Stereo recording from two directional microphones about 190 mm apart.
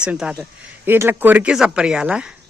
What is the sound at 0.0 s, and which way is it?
Speech, 5° right (ahead or behind).